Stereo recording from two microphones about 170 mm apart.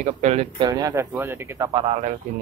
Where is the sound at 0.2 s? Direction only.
40° right (ahead or behind).